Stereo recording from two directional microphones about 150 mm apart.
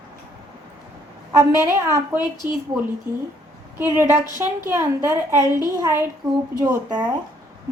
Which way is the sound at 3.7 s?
15° right (ahead or behind).